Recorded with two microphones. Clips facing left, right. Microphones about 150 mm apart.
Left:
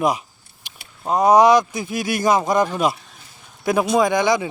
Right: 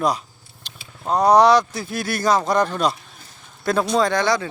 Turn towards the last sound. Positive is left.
turn(degrees=15)  # may be behind; listen again after turning